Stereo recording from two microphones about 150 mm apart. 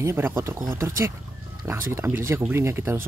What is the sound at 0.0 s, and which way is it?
Speech, 15° right (ahead or behind).